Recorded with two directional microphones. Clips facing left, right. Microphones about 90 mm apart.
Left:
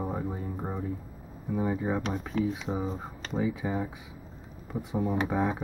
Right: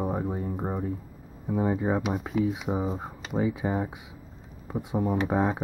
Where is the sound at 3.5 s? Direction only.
30° right (ahead or behind).